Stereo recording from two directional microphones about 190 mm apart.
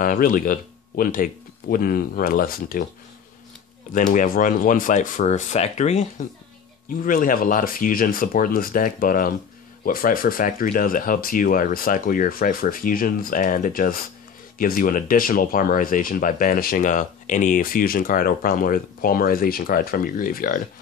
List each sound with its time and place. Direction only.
0.0 s speech: 45° left (ahead or behind)
3.9 s speech: 45° left (ahead or behind)